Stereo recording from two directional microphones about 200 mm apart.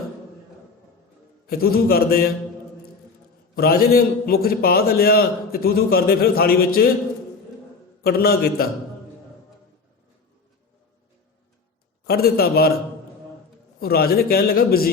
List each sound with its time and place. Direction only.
1.5 s a man's voice: 50° left (ahead or behind)
3.5 s a man's voice: 50° left (ahead or behind)
8.0 s a man's voice: 50° left (ahead or behind)
12.0 s a man's voice: 50° left (ahead or behind)
13.7 s a man's voice: 50° left (ahead or behind)